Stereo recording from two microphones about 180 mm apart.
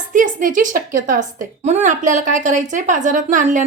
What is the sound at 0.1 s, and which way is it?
A woman's voice, 45° right (ahead or behind).